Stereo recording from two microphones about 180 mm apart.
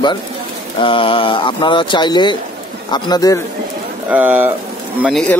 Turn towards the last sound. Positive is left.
turn(degrees=0)  # may be behind; listen again after turning